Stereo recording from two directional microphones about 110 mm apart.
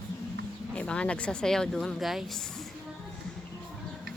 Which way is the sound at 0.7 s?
10° left (ahead or behind).